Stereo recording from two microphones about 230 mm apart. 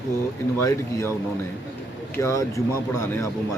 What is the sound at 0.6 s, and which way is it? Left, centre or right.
Speech, centre.